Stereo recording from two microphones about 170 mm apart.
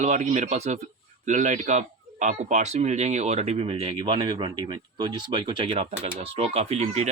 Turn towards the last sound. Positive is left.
turn(degrees=-40)  # may be behind; listen again after turning